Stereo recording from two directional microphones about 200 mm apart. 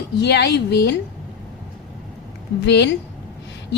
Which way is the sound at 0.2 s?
55° left (ahead or behind).